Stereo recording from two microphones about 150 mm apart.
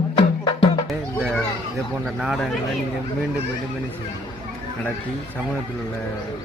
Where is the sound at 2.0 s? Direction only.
Centre (ahead or behind).